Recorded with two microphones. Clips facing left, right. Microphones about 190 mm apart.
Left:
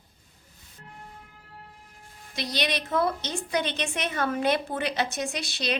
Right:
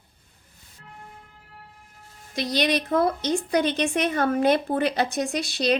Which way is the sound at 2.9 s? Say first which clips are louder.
Right 3 dB; 55° right (ahead or behind).